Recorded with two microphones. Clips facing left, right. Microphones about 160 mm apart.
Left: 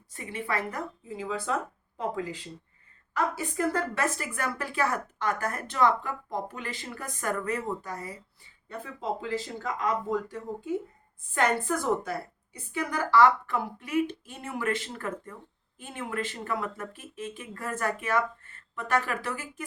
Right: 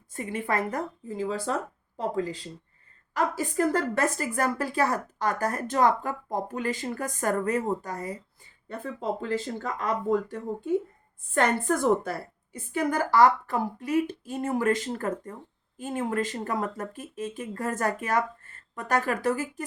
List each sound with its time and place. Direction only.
0.1 s a woman's voice: 45° right (ahead or behind)